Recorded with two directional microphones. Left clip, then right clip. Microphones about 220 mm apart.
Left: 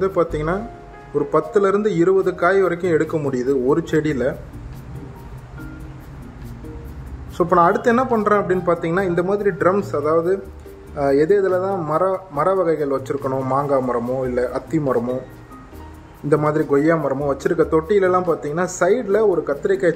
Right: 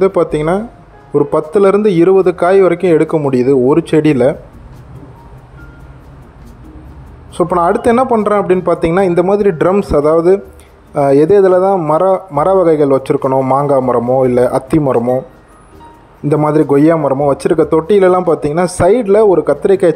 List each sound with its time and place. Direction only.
0.0 s a man's voice: 20° right (ahead or behind)
7.3 s a man's voice: 20° right (ahead or behind)
13.6 s a man's voice: 25° right (ahead or behind)
16.3 s a man's voice: 25° right (ahead or behind)